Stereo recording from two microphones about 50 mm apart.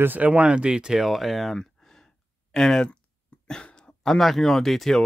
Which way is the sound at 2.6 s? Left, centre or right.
Centre.